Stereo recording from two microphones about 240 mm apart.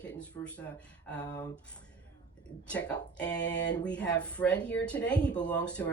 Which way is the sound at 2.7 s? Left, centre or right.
Centre.